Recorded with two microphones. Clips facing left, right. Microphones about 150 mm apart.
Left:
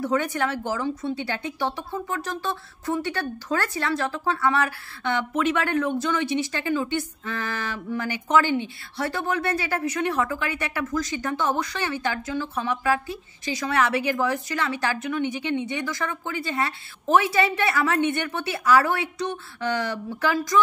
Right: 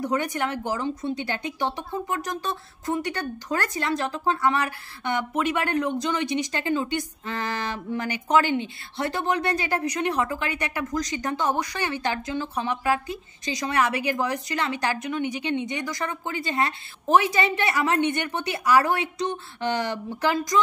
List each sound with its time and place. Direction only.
0.0 s a woman's voice: 15° right (ahead or behind)